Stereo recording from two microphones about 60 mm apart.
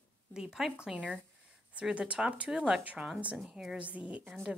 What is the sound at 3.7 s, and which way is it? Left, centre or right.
Speech, right.